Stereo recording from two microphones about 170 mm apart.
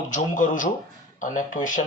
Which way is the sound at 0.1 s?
50° left (ahead or behind).